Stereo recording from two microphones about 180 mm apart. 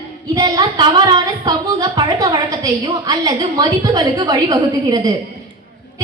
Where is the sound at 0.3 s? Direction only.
20° right (ahead or behind).